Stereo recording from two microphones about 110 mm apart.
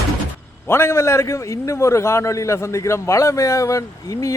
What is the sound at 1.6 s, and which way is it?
Speech, 25° left (ahead or behind).